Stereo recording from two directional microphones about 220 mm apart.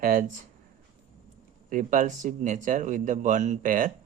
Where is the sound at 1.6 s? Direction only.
35° right (ahead or behind).